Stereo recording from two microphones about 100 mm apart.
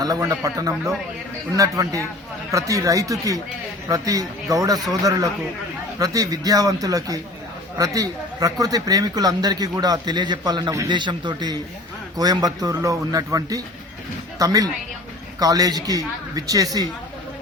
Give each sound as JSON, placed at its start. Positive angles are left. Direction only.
{"t": 0.0, "sound": "speech", "side_deg": -40}